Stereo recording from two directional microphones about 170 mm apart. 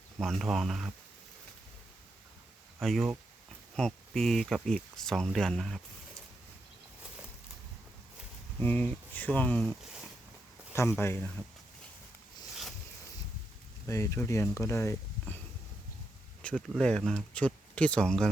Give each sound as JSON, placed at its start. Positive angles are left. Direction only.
{"t": 0.2, "sound": "speech", "side_deg": 0}
{"t": 2.8, "sound": "speech", "side_deg": 0}
{"t": 8.5, "sound": "speech", "side_deg": 10}
{"t": 11.0, "sound": "speech", "side_deg": 15}
{"t": 13.8, "sound": "speech", "side_deg": 15}
{"t": 16.4, "sound": "speech", "side_deg": 5}